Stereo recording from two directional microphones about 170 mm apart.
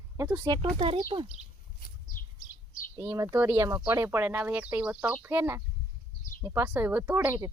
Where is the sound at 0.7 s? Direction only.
35° right (ahead or behind).